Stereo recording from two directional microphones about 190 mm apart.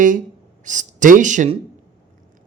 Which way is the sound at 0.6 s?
40° right (ahead or behind).